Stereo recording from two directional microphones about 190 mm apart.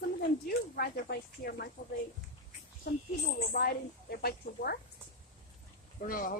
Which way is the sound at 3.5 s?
50° left (ahead or behind).